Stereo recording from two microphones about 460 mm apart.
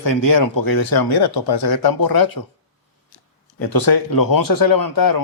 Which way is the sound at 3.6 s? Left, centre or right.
Left.